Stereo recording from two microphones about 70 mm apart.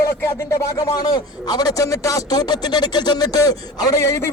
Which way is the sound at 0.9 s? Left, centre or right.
Left.